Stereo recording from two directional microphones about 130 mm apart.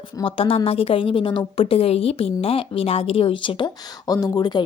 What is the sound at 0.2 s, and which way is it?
A woman's voice, 45° left (ahead or behind).